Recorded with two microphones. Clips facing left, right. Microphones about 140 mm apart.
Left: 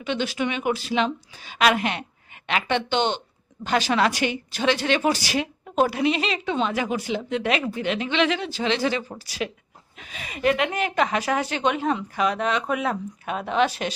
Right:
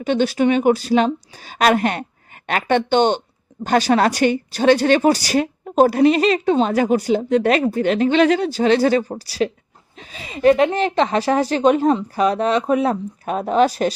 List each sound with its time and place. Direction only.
0.0 s a woman's voice: 45° right (ahead or behind)